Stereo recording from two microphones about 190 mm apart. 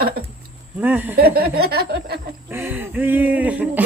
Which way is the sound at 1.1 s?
55° right (ahead or behind).